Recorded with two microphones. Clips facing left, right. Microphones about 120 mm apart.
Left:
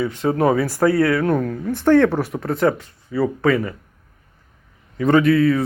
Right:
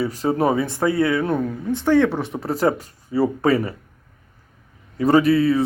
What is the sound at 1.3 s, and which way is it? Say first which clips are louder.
Speech: left 2 dB; 10° right (ahead or behind).